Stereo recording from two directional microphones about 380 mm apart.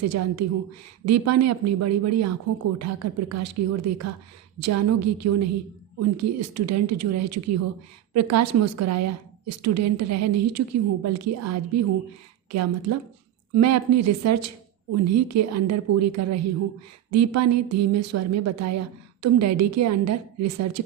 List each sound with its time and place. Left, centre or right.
0.0 s a woman's voice: right